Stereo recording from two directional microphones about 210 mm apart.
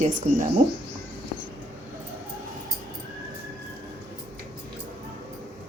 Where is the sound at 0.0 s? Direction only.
40° right (ahead or behind).